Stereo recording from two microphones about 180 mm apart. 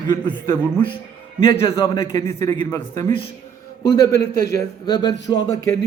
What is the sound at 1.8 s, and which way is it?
Speech, 30° left (ahead or behind).